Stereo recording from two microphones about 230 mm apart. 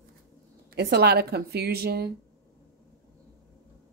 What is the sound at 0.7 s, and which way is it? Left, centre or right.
A woman's voice, right.